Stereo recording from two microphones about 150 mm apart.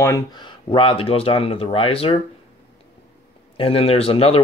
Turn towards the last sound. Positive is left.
turn(degrees=40)  # may be behind; listen again after turning